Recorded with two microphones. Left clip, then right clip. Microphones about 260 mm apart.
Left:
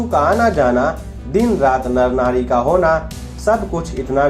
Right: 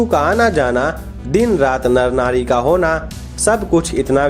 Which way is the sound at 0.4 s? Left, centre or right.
Right.